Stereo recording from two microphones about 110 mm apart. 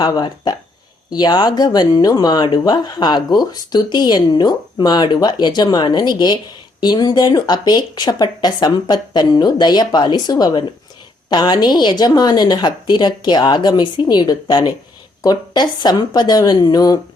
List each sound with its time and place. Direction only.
0.0 s speech: 40° left (ahead or behind)